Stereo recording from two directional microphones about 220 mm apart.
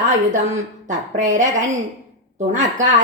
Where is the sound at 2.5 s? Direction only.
35° right (ahead or behind).